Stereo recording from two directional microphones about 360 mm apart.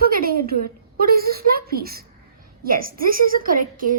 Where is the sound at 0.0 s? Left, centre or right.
Right.